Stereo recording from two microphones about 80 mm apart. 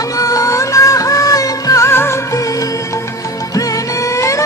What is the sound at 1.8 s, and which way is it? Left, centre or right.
Music, left.